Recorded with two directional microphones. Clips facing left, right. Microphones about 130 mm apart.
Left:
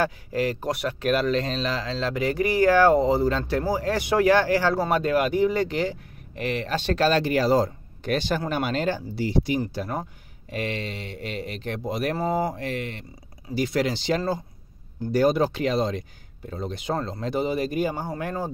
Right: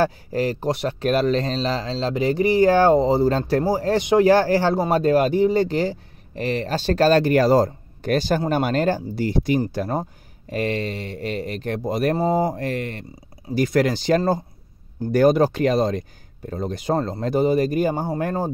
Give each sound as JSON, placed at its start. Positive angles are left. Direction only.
{"t": 0.0, "sound": "speech", "side_deg": -35}
{"t": 4.0, "sound": "speech", "side_deg": -20}
{"t": 4.3, "sound": "speech", "side_deg": -35}
{"t": 9.6, "sound": "speech", "side_deg": -35}
{"t": 12.2, "sound": "speech", "side_deg": -25}
{"t": 12.5, "sound": "speech", "side_deg": -45}